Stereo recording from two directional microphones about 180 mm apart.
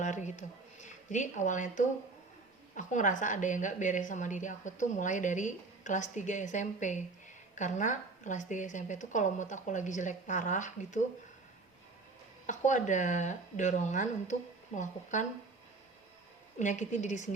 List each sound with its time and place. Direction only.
0.0 s a woman's voice: 40° left (ahead or behind)
12.5 s a woman's voice: 45° left (ahead or behind)
16.6 s a woman's voice: 40° left (ahead or behind)